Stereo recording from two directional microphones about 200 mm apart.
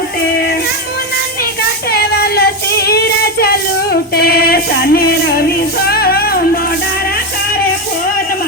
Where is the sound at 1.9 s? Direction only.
50° left (ahead or behind).